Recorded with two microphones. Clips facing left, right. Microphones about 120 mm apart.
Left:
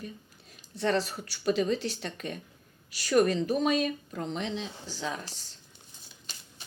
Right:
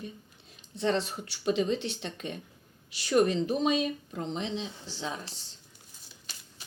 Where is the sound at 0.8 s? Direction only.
25° right (ahead or behind).